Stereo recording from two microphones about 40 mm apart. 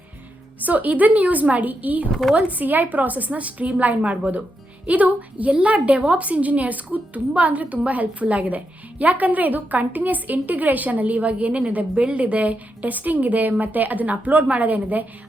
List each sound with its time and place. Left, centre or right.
0.6 s a woman's voice: right